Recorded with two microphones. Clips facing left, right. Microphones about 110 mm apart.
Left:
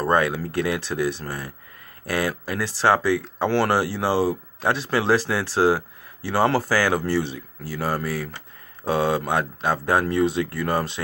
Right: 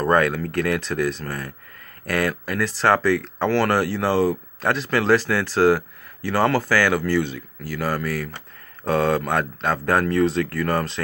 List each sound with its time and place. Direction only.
0.0 s speech: 15° left (ahead or behind)